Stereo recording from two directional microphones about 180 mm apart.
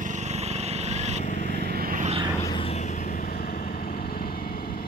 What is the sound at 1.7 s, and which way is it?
Vehicle, 50° right (ahead or behind).